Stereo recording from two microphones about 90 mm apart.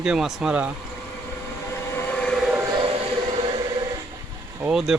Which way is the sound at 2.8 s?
80° right.